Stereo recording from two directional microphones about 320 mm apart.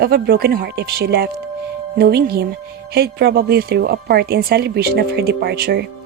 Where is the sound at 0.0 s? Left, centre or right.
Right.